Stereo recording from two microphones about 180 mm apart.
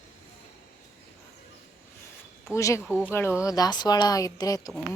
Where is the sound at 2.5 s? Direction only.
15° left (ahead or behind).